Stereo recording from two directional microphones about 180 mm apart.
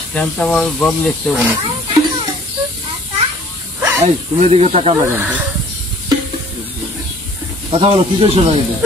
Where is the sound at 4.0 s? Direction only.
35° right (ahead or behind).